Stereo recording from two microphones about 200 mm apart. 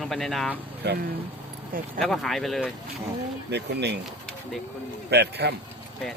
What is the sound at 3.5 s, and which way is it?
Speech, 60° right (ahead or behind).